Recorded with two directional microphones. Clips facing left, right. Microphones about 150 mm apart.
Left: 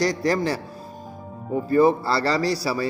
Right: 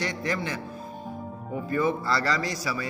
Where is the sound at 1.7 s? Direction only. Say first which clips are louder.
Left 7 dB; 35° left (ahead or behind).